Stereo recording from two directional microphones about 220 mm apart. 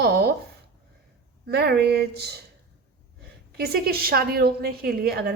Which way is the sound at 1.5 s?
45° right (ahead or behind).